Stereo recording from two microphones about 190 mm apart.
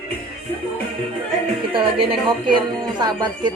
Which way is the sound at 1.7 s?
25° right (ahead or behind).